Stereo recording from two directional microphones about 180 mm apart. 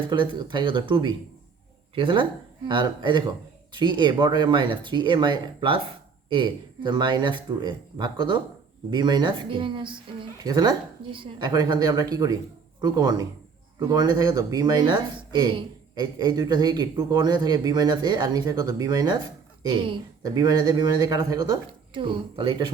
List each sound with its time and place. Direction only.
0.1 s speech: 25° right (ahead or behind)